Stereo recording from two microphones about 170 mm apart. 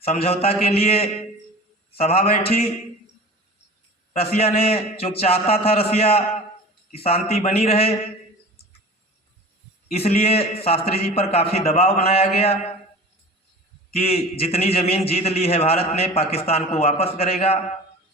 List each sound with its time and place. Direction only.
0.0 s a man's voice: 35° left (ahead or behind)
4.1 s a man's voice: 35° left (ahead or behind)
9.9 s a man's voice: 35° left (ahead or behind)
13.9 s a man's voice: 35° left (ahead or behind)